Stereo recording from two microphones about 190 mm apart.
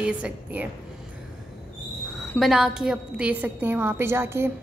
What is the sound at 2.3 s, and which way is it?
A woman's voice, centre (ahead or behind).